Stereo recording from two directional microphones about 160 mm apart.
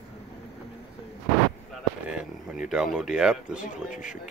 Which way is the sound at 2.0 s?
5° right (ahead or behind).